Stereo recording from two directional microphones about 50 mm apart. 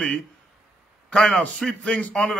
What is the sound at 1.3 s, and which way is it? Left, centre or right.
Speech, centre.